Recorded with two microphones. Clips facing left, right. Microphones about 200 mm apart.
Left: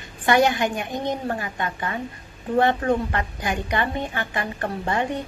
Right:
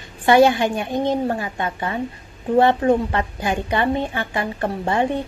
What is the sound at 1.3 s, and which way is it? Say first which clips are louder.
A woman's voice: right 3 dB; 25° right (ahead or behind).